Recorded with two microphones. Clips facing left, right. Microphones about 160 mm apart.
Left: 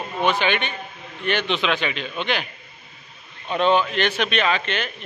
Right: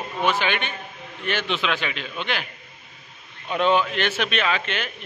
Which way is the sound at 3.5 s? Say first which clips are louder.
Left 1 dB; 5° right (ahead or behind).